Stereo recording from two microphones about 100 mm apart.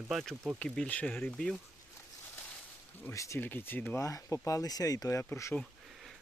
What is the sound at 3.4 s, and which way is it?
Speech, 20° left (ahead or behind).